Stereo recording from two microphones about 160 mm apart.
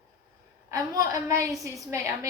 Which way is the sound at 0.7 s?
20° right (ahead or behind).